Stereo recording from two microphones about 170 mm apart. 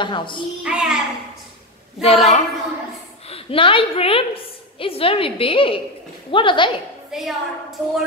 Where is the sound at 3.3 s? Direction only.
35° left (ahead or behind).